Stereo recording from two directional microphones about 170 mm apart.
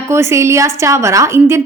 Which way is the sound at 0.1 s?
15° right (ahead or behind).